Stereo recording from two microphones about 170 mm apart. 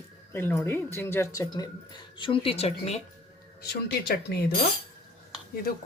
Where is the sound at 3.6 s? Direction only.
75° left (ahead or behind).